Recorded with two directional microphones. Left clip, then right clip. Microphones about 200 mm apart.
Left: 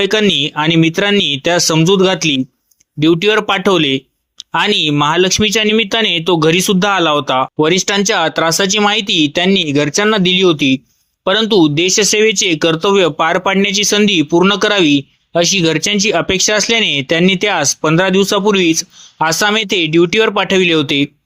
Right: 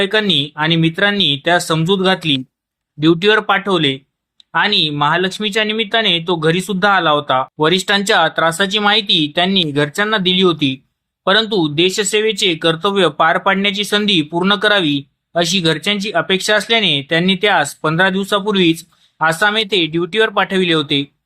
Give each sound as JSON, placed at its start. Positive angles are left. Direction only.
{"t": 0.0, "sound": "speech", "side_deg": 40}